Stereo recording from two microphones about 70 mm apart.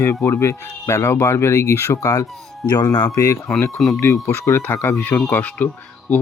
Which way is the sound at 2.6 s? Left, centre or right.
Left.